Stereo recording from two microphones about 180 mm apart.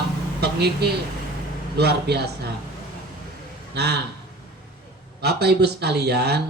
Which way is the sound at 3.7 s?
65° right (ahead or behind).